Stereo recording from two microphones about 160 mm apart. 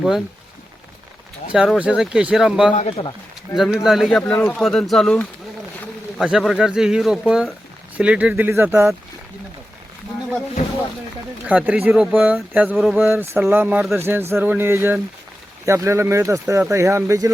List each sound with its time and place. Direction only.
1.5 s speech: 5° right (ahead or behind)
2.7 s speech: 40° left (ahead or behind)
3.5 s speech: centre (ahead or behind); by 9.0 s 15° right (ahead or behind)
11.4 s speech: 10° right (ahead or behind)
13.0 s speech: 15° right (ahead or behind)